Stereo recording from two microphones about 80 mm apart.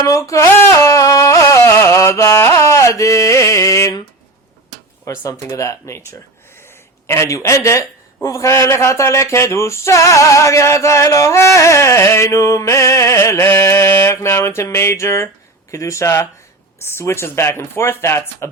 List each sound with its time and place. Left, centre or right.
0.0 s a sound: left
2.4 s carnatic music: left
5.0 s speech: left